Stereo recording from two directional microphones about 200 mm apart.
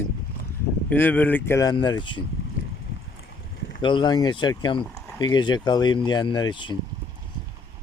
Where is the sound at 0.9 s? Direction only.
10° left (ahead or behind).